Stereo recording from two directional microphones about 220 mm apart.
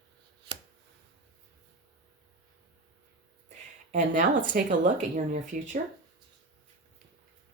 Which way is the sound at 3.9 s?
35° right (ahead or behind).